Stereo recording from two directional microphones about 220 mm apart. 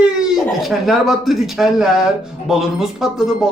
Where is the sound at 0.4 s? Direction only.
Centre (ahead or behind).